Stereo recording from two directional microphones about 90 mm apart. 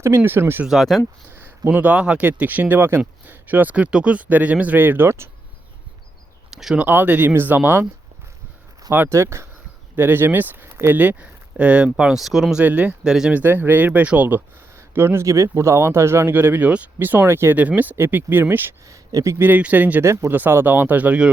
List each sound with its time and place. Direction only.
0.3 s speech: 25° right (ahead or behind)
0.6 s speech: 5° right (ahead or behind)
1.3 s speech: 25° right (ahead or behind)
6.5 s speech: 5° right (ahead or behind)
6.8 s speech: 20° right (ahead or behind)
8.9 s speech: 25° right (ahead or behind); by 13.4 s 5° right (ahead or behind)
13.4 s speech: 20° right (ahead or behind)
18.9 s speech: 35° right (ahead or behind)
19.4 s speech: 20° right (ahead or behind)